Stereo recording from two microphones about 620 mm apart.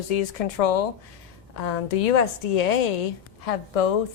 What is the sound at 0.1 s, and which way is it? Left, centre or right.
Speech, left.